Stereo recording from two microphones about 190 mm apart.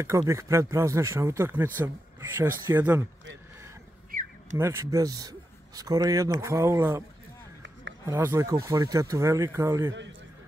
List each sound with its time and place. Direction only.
0.0 s speech: 15° right (ahead or behind)
4.1 s a sound: 50° right (ahead or behind)
4.6 s speech: 15° right (ahead or behind)
8.1 s speech: 15° right (ahead or behind)